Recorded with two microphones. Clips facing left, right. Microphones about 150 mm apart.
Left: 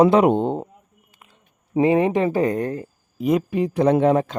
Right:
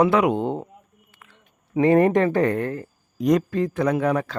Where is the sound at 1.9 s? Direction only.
5° left (ahead or behind).